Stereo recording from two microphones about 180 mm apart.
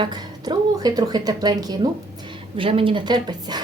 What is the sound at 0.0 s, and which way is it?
A woman's voice, 20° right (ahead or behind).